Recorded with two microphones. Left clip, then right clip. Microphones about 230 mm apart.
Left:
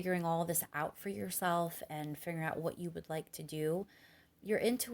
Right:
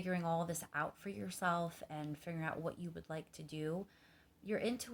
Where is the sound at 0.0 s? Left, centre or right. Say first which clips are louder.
Left 4 dB; left.